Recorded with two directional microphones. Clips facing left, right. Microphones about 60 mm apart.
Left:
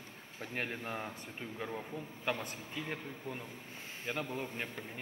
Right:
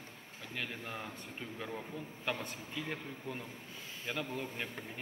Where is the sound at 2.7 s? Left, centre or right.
Left.